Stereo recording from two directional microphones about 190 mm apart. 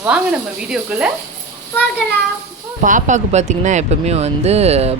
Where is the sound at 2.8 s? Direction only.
40° right (ahead or behind).